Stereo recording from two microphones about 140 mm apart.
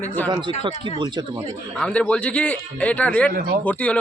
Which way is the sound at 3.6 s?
10° left (ahead or behind).